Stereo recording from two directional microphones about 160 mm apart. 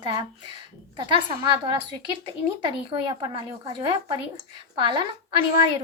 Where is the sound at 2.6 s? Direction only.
30° right (ahead or behind).